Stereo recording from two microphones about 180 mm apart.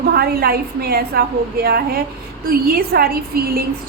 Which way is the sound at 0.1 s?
60° right (ahead or behind).